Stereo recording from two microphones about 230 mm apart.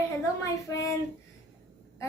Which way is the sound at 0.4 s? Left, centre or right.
Centre.